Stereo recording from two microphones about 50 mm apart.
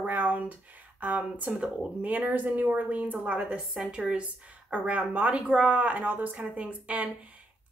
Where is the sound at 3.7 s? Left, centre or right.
Centre.